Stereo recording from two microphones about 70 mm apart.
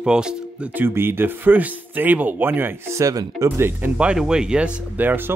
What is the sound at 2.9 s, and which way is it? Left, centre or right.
Speech, right.